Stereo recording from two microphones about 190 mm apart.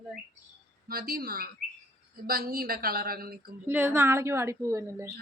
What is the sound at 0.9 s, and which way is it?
A woman's voice, 55° right (ahead or behind).